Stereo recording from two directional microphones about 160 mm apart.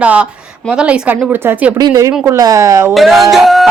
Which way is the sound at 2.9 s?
Centre (ahead or behind).